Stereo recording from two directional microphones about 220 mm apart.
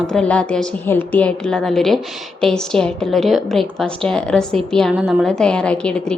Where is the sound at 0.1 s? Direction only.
5° left (ahead or behind).